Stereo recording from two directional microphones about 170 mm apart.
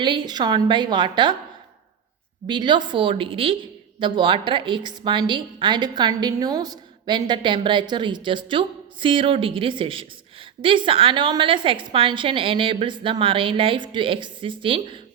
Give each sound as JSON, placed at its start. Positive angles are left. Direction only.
{"t": 0.0, "sound": "a woman's voice", "side_deg": -25}
{"t": 2.5, "sound": "a woman's voice", "side_deg": -25}